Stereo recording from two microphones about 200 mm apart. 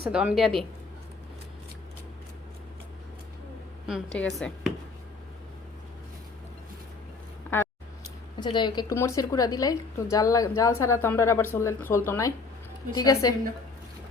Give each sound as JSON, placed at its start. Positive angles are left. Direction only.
{"t": 0.1, "sound": "speech", "side_deg": -5}
{"t": 3.8, "sound": "speech", "side_deg": 0}
{"t": 8.4, "sound": "a woman's voice", "side_deg": 20}